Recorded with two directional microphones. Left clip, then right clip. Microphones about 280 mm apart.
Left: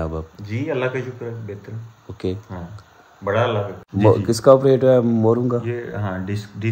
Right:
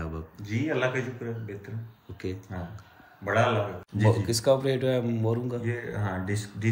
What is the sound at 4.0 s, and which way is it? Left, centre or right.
Speech, left.